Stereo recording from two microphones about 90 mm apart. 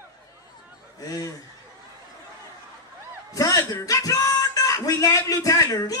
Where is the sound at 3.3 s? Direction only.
40° left (ahead or behind).